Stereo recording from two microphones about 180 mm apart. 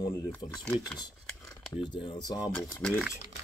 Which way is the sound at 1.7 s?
25° left (ahead or behind).